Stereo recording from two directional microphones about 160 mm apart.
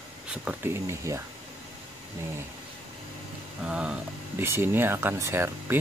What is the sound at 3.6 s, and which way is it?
Speech, 5° right (ahead or behind).